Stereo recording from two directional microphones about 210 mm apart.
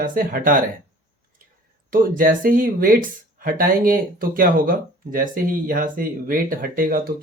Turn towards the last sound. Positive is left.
turn(degrees=-45)  # may be behind; listen again after turning